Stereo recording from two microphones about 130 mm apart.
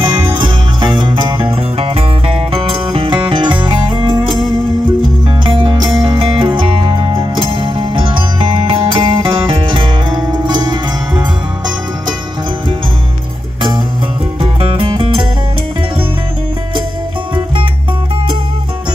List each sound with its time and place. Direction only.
0.4 s music: 35° right (ahead or behind)
14.4 s music: 40° right (ahead or behind)